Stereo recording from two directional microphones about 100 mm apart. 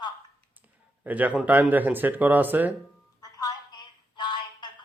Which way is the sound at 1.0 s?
15° right (ahead or behind).